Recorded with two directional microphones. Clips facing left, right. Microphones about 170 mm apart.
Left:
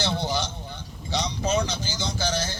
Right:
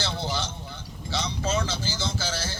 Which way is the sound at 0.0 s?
15° left (ahead or behind).